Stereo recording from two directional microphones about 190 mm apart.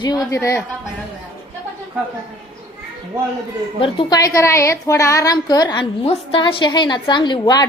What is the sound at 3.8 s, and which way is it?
A woman's voice, 25° left (ahead or behind).